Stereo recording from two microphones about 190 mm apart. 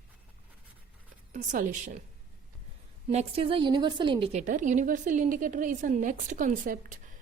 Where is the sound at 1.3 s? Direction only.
40° right (ahead or behind).